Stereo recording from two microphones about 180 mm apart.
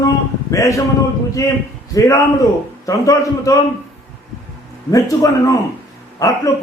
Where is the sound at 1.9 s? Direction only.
15° left (ahead or behind).